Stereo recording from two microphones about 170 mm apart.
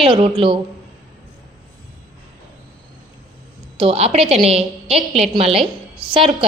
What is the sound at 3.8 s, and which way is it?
A woman's voice, 35° right (ahead or behind).